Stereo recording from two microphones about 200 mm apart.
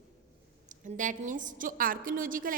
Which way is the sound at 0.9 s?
40° right (ahead or behind).